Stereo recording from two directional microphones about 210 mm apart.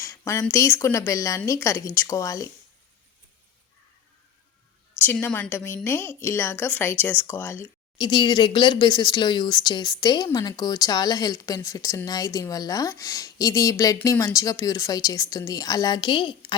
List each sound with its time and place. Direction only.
0.0 s speech: 15° left (ahead or behind)
4.9 s speech: 10° left (ahead or behind)
7.9 s speech: 20° left (ahead or behind)